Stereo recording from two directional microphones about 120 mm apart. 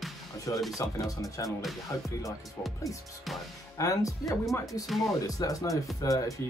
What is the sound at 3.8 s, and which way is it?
Speech, 30° left (ahead or behind).